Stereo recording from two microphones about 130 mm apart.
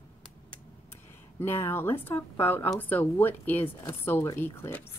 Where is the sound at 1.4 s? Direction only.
15° left (ahead or behind).